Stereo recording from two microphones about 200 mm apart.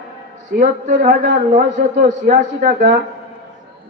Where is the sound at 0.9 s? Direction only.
40° right (ahead or behind).